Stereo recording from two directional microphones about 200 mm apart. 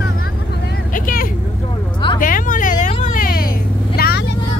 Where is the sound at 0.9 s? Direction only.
45° left (ahead or behind).